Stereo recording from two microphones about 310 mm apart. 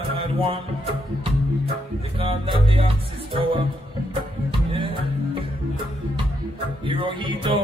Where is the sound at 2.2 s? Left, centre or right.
Centre.